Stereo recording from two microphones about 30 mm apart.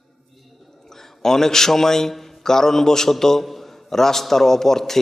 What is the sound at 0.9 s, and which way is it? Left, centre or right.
A man's voice, centre.